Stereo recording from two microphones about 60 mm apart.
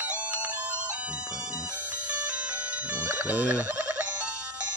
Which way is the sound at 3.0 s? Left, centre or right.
Right.